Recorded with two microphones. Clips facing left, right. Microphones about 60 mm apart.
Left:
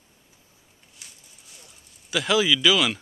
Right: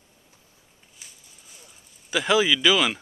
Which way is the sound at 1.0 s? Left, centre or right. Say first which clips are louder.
Even; centre.